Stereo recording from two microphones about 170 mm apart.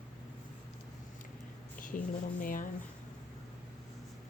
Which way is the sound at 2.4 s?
55° left (ahead or behind).